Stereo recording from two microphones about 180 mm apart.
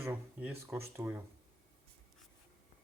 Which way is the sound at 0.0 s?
10° right (ahead or behind).